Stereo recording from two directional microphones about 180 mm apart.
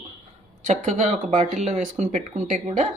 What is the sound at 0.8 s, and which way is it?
Speech, 40° right (ahead or behind).